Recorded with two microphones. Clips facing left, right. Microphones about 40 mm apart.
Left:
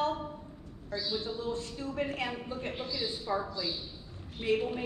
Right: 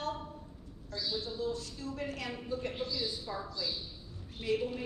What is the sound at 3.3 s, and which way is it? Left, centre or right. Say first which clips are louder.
Speech: left 5 dB; left.